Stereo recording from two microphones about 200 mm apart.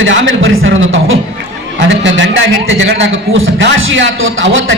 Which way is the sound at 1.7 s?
65° right (ahead or behind).